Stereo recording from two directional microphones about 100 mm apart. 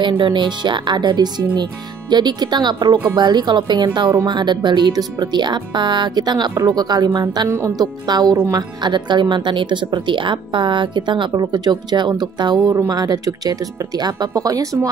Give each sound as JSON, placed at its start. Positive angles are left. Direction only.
{"t": 0.2, "sound": "speech", "side_deg": -50}
{"t": 7.4, "sound": "a woman's voice", "side_deg": -25}
{"t": 7.8, "sound": "speech", "side_deg": -45}
{"t": 12.5, "sound": "a woman's voice", "side_deg": -30}
{"t": 12.9, "sound": "speech", "side_deg": -40}